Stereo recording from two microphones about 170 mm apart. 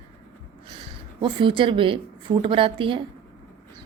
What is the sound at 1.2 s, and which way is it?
A woman's voice, 30° right (ahead or behind).